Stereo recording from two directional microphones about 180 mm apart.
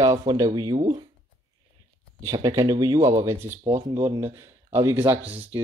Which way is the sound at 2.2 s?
20° right (ahead or behind).